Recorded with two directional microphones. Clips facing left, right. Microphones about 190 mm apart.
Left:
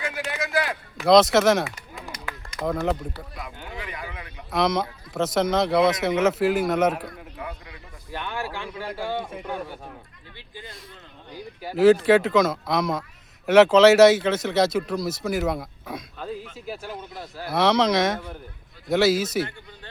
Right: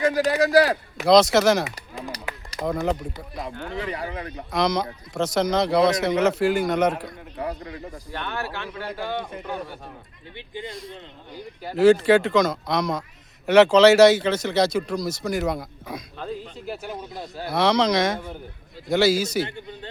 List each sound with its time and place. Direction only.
0.0 s a man's voice: 40° right (ahead or behind)
1.0 s speech: centre (ahead or behind)
2.6 s speech: centre (ahead or behind)
3.8 s a man's voice: 35° right (ahead or behind)
4.5 s speech: centre (ahead or behind)
7.3 s a man's voice: 35° right (ahead or behind)
8.1 s speech: 10° left (ahead or behind)
10.3 s speech: 20° right (ahead or behind)
11.6 s speech: 5° left (ahead or behind)
16.8 s speech: 20° right (ahead or behind)
17.5 s speech: centre (ahead or behind)